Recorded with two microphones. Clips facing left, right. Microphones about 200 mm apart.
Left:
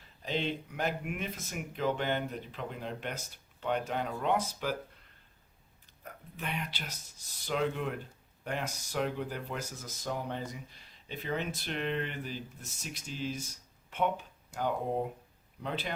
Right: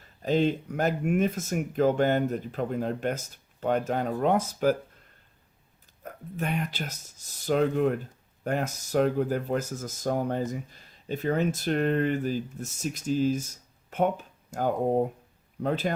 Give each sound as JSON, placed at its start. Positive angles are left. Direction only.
{"t": 0.2, "sound": "speech", "side_deg": -45}
{"t": 6.0, "sound": "speech", "side_deg": -45}